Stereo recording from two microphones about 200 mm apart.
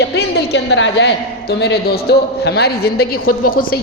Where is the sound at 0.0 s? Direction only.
55° left (ahead or behind).